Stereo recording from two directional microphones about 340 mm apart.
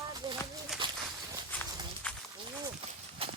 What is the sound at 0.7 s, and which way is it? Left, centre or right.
Speech, centre.